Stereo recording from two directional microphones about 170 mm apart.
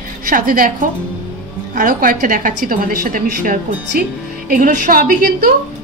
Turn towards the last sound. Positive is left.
turn(degrees=-60)  # may be behind; listen again after turning